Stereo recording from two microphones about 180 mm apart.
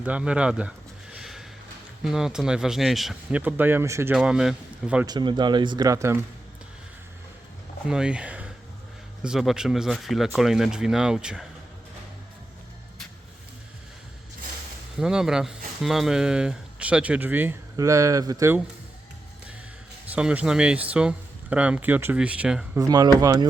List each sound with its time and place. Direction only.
0.0 s speech: 5° right (ahead or behind)
1.1 s a sound: centre (ahead or behind)
2.0 s speech: 5° right (ahead or behind)
5.0 s speech: 25° right (ahead or behind)
7.9 s speech: 5° right (ahead or behind)
14.9 s speech: 5° right (ahead or behind)
20.1 s speech: 5° right (ahead or behind)
22.8 s speech: 20° right (ahead or behind)